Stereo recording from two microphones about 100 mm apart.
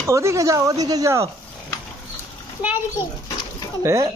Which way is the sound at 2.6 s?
15° right (ahead or behind).